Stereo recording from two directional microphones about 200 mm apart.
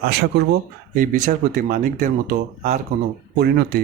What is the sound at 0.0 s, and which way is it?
Speech, 55° right (ahead or behind).